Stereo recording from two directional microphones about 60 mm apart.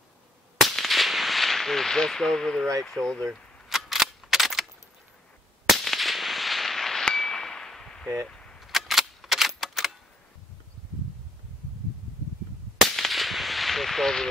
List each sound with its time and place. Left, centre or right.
0.6 s firecracker: centre
2.8 s speech: centre
3.6 s cap gun: centre
5.7 s firecracker: centre
7.1 s clang: centre
8.3 s cap gun: centre
8.5 s a sound: centre
9.6 s typewriter: centre
12.9 s whip: centre